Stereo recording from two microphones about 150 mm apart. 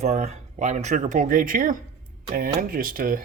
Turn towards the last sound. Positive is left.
turn(degrees=-65)  # may be behind; listen again after turning